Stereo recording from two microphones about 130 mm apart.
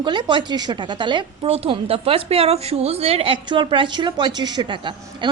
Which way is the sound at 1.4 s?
50° right (ahead or behind).